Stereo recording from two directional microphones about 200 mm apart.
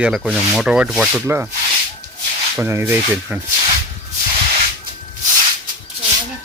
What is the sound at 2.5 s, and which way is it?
Speech, 10° right (ahead or behind).